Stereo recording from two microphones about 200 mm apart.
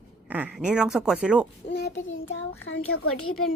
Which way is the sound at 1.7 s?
60° left (ahead or behind).